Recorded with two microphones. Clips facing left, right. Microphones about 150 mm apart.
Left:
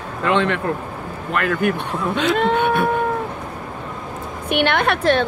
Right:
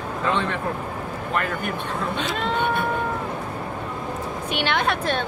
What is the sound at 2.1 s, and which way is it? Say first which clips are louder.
Speech: left 9 dB; 60° left (ahead or behind).